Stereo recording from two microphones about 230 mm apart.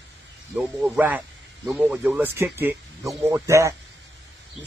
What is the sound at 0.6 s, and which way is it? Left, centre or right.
A man's voice, centre.